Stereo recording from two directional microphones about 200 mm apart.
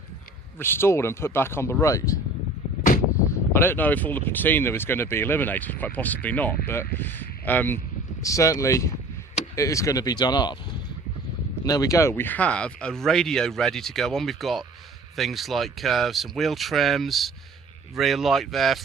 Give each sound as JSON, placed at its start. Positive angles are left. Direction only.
{"t": 0.6, "sound": "speech", "side_deg": 10}
{"t": 3.5, "sound": "speech", "side_deg": 10}
{"t": 11.6, "sound": "speech", "side_deg": 15}